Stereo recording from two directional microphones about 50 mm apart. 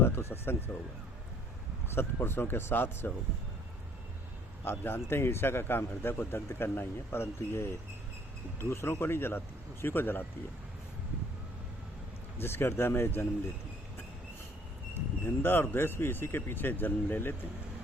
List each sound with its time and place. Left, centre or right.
0.0 s vehicle: left
2.0 s speech: left
4.6 s speech: left
12.4 s speech: left
14.9 s speech: left